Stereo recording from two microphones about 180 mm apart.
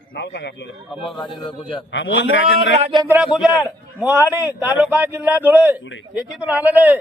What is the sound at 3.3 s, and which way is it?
A man's voice, 5° right (ahead or behind).